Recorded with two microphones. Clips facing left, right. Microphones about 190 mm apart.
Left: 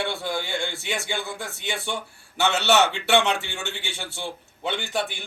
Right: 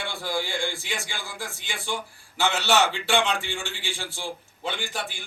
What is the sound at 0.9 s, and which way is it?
A man's voice, 65° left (ahead or behind).